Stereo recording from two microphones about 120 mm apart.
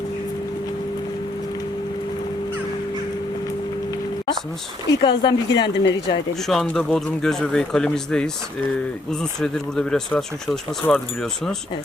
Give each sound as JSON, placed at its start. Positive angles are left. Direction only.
{"t": 5.0, "sound": "speech", "side_deg": 40}
{"t": 6.5, "sound": "speech", "side_deg": 0}
{"t": 9.4, "sound": "speech", "side_deg": 5}
{"t": 10.8, "sound": "speech", "side_deg": 25}